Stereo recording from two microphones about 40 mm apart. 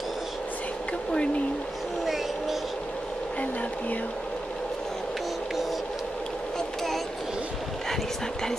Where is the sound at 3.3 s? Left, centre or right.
Left.